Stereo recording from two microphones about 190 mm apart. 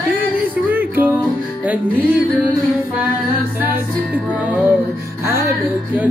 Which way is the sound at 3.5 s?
10° right (ahead or behind).